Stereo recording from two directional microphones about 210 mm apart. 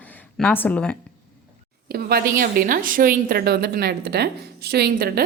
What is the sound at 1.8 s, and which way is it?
A woman's voice, 45° right (ahead or behind).